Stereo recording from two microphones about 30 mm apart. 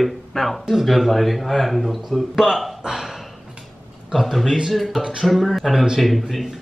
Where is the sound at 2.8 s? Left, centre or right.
Centre.